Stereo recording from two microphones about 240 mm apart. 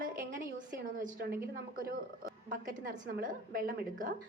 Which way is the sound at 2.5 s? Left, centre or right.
Right.